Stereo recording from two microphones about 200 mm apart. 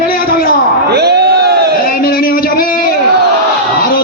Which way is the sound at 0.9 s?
55° right (ahead or behind).